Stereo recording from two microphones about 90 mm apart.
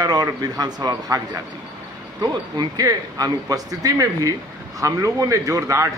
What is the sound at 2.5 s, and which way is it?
Speech, 50° right (ahead or behind).